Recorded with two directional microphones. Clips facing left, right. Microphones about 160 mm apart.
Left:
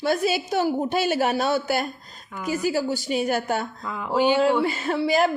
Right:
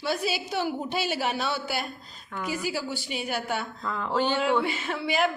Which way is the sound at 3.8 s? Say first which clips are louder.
Left 5 dB; 10° left (ahead or behind).